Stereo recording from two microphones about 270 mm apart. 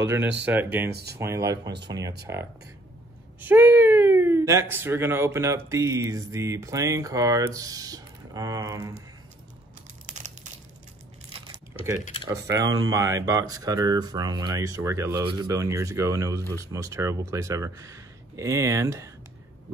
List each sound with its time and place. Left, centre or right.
0.5 s speech: centre
0.8 s speech: right
1.1 s speech: centre
10.0 s crumpling: right
11.3 s crumpling: centre
12.0 s speech: left
12.4 s speech: centre